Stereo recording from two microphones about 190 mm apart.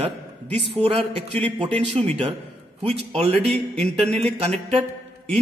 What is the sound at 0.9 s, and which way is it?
Speech, 30° right (ahead or behind).